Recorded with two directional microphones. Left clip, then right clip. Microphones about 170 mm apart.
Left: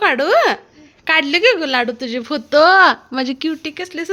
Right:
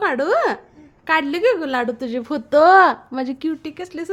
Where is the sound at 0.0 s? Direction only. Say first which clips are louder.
Left 5 dB; 5° right (ahead or behind).